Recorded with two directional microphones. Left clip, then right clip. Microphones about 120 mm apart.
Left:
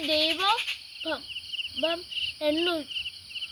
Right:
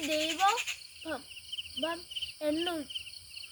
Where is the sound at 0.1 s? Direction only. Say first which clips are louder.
Left 8 dB; 40° right (ahead or behind).